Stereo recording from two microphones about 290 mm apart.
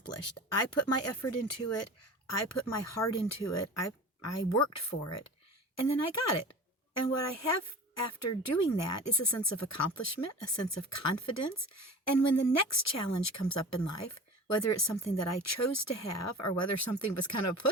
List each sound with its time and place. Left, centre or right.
0.8 s a woman's voice: left